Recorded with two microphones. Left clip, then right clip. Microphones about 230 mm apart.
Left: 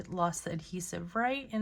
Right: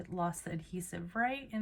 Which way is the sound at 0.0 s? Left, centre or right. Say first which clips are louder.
Left 5 dB; centre.